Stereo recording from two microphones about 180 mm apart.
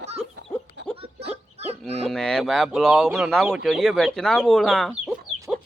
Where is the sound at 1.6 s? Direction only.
35° right (ahead or behind).